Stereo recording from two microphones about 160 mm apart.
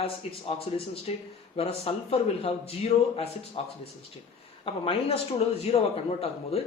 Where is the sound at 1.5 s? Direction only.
40° left (ahead or behind).